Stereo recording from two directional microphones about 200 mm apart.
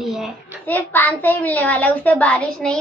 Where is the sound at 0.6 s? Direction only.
10° left (ahead or behind).